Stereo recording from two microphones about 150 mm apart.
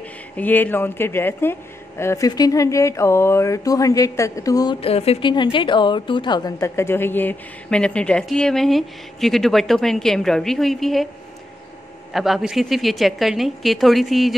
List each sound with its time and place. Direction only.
0.4 s speech: 10° left (ahead or behind)
4.7 s a woman's voice: 40° left (ahead or behind)
5.3 s a woman's voice: 30° left (ahead or behind); by 11.1 s centre (ahead or behind)
12.1 s a woman's voice: centre (ahead or behind)